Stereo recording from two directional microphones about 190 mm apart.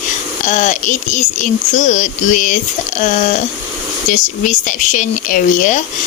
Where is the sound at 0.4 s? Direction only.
40° left (ahead or behind).